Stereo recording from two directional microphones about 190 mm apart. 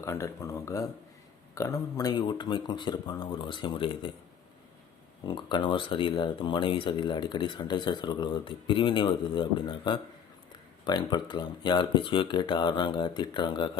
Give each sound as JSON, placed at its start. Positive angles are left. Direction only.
{"t": 0.0, "sound": "speech", "side_deg": 15}
{"t": 5.2, "sound": "speech", "side_deg": 25}